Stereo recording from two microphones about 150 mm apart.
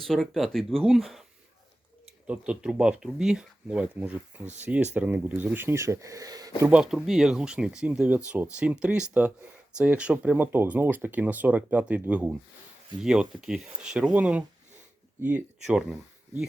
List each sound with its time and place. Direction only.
0.0 s speech: centre (ahead or behind)
2.2 s speech: 10° right (ahead or behind); by 6.5 s 25° right (ahead or behind)
6.6 s speech: 10° right (ahead or behind)